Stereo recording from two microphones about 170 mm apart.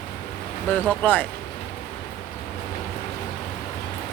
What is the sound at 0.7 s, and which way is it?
Speech, 10° left (ahead or behind).